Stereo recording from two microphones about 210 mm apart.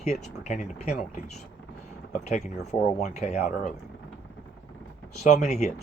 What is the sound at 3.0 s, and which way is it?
Speech, 30° left (ahead or behind).